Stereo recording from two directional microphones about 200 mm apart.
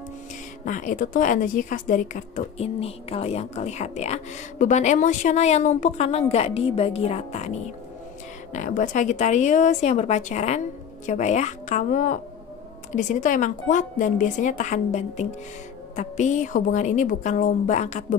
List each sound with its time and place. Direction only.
0.7 s a woman's voice: 40° left (ahead or behind)
8.5 s a woman's voice: 40° left (ahead or behind)